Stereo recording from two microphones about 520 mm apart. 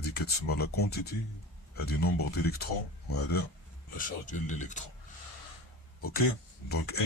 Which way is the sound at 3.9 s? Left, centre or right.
Centre.